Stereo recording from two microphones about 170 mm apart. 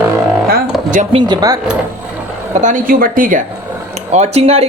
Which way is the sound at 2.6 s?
50° right (ahead or behind).